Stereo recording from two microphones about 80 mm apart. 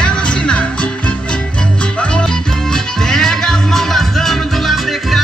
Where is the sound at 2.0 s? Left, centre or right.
Centre.